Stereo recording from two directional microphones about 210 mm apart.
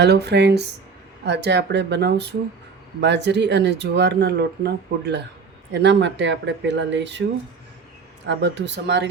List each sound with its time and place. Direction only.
0.0 s speech: 55° right (ahead or behind)